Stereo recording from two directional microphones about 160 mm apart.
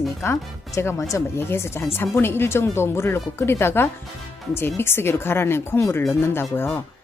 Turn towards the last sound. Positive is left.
turn(degrees=10)  # may be behind; listen again after turning